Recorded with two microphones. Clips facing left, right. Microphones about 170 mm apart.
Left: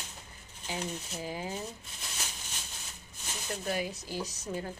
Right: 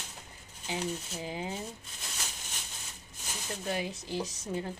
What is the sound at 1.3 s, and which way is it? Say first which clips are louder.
Speech: right 1 dB; 20° right (ahead or behind).